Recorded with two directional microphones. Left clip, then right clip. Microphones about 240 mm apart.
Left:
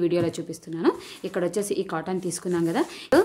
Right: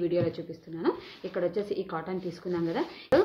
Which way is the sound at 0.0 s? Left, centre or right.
Left.